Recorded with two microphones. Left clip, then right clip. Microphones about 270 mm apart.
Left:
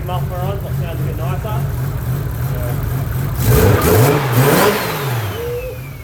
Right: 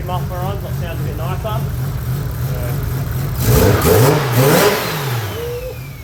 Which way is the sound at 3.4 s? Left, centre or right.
Centre.